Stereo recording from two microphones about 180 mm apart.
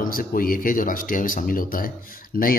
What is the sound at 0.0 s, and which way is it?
A man's voice, 50° left (ahead or behind).